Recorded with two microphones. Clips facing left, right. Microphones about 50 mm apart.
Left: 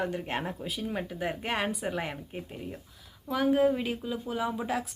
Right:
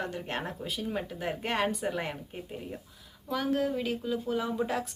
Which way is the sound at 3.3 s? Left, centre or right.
Centre.